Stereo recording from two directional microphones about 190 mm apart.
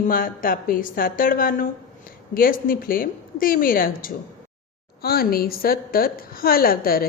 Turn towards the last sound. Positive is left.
turn(degrees=50)  # may be behind; listen again after turning